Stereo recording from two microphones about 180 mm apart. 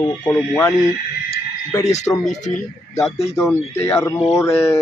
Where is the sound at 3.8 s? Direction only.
15° left (ahead or behind).